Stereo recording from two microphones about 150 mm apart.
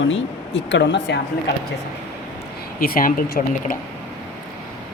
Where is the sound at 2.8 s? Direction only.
75° left (ahead or behind).